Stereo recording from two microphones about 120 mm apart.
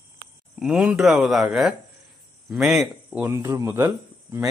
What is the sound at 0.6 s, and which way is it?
Speech, 5° right (ahead or behind).